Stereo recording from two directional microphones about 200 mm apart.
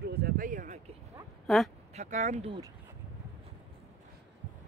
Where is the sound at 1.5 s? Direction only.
Centre (ahead or behind).